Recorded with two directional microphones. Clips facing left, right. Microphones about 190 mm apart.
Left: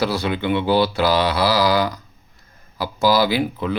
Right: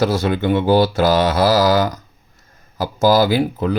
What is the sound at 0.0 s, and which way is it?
Speech, 45° right (ahead or behind).